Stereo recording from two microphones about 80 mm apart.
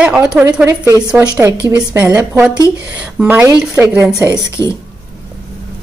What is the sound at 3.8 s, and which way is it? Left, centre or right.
Speech, right.